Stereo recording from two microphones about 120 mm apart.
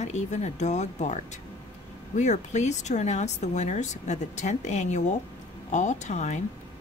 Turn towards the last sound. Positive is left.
turn(degrees=75)  # may be behind; listen again after turning